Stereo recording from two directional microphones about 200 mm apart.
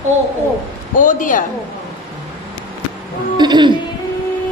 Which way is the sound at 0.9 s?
40° left (ahead or behind).